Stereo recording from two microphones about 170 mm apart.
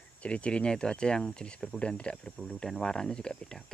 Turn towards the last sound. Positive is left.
turn(degrees=5)  # may be behind; listen again after turning